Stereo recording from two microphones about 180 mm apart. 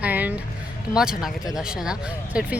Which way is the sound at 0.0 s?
10° right (ahead or behind).